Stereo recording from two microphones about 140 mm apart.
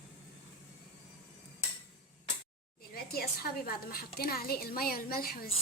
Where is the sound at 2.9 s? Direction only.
90° left.